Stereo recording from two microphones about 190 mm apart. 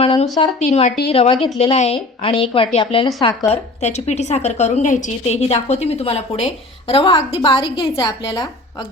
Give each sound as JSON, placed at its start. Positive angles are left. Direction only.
{"t": 0.0, "sound": "a woman's voice", "side_deg": 30}
{"t": 3.5, "sound": "a woman's voice", "side_deg": 35}